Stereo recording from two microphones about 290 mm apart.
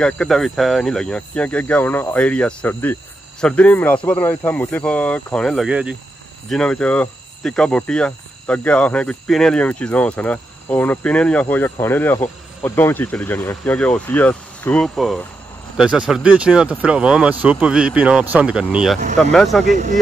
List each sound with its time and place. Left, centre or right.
0.0 s speech: centre
19.6 s speech: right